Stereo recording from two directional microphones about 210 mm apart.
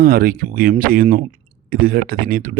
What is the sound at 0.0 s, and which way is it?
Speech, 45° right (ahead or behind).